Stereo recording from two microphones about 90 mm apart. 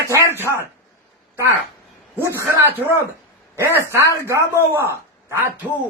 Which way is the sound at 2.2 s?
25° right (ahead or behind).